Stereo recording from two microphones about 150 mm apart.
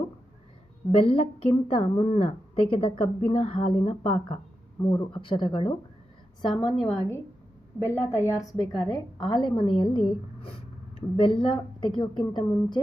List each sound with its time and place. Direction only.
0.9 s a woman's voice: 40° left (ahead or behind)
4.8 s speech: 20° left (ahead or behind)
5.1 s a woman's voice: 35° left (ahead or behind)
7.8 s a woman's voice: 15° left (ahead or behind)